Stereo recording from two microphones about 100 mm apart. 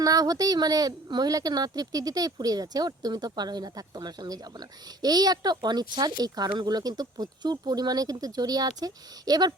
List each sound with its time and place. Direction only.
0.0 s speech: 35° right (ahead or behind)